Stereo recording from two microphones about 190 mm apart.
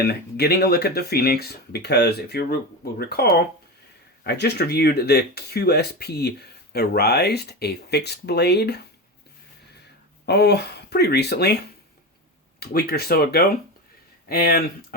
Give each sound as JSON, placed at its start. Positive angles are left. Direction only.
{"t": 0.0, "sound": "speech", "side_deg": 55}
{"t": 10.2, "sound": "speech", "side_deg": 60}
{"t": 12.5, "sound": "speech", "side_deg": 55}